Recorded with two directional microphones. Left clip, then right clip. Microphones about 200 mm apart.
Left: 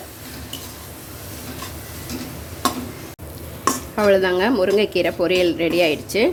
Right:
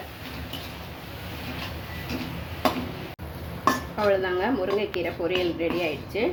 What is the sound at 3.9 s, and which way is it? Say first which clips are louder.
Speech: left 7 dB; 55° left (ahead or behind).